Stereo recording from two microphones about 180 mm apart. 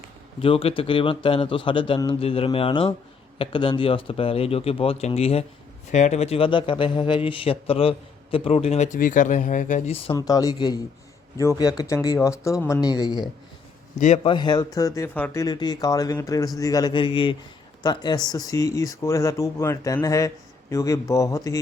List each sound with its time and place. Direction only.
0.4 s a man's voice: 30° left (ahead or behind)
10.2 s a man's voice: 20° left (ahead or behind)
14.0 s speech: 40° left (ahead or behind)
14.3 s a man's voice: 25° left (ahead or behind)